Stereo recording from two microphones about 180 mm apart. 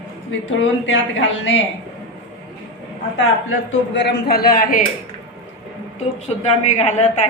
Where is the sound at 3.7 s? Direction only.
70° left (ahead or behind); by 4.8 s 55° left (ahead or behind).